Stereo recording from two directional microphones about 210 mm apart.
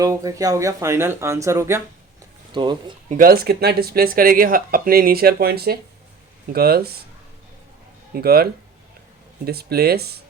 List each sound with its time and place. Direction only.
0.0 s speech: 15° right (ahead or behind)
3.1 s speech: 45° right (ahead or behind)
8.1 s speech: 45° right (ahead or behind)